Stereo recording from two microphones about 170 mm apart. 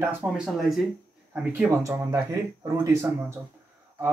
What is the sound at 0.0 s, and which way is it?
Speech, 10° right (ahead or behind).